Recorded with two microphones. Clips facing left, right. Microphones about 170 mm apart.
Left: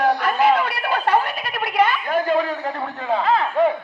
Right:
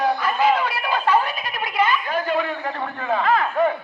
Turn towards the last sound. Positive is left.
turn(degrees=25)  # may be behind; listen again after turning